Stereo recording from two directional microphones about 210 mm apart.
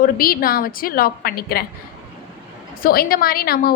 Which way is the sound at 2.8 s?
45° left (ahead or behind).